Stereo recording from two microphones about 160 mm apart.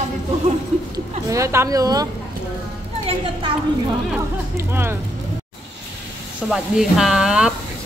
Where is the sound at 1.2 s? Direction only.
20° right (ahead or behind).